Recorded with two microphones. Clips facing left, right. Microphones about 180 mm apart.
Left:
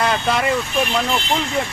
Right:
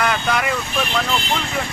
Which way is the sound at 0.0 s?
25° left (ahead or behind).